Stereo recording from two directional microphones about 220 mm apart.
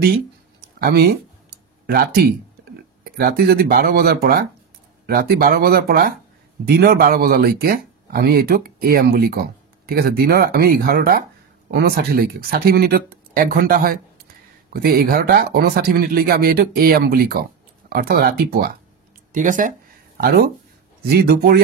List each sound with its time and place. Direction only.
0.7 s speech: 45° right (ahead or behind)